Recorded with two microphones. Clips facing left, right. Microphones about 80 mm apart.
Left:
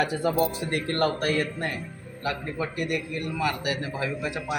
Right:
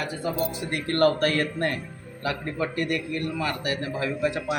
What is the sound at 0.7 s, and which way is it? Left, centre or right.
Speech, left.